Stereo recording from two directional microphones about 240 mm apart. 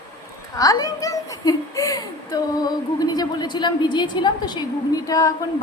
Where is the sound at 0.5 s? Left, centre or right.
Centre.